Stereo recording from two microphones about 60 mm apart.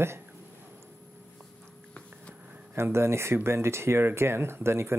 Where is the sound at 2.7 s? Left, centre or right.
Right.